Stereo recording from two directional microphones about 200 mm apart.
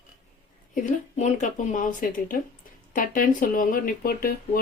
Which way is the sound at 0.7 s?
40° left (ahead or behind).